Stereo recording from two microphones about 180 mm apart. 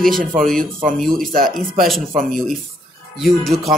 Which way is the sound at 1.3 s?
50° right (ahead or behind).